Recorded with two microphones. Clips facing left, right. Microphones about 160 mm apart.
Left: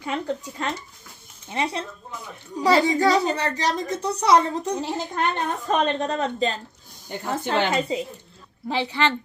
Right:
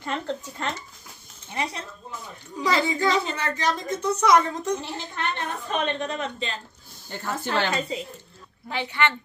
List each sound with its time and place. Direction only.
0.0 s speech: 10° left (ahead or behind)
1.5 s a woman's voice: 25° left (ahead or behind)
7.1 s a woman's voice: 20° left (ahead or behind)